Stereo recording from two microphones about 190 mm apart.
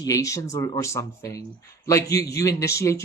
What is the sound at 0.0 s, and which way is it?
A woman's voice, 20° left (ahead or behind).